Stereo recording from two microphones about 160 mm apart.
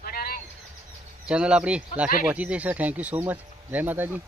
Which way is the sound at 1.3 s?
5° right (ahead or behind).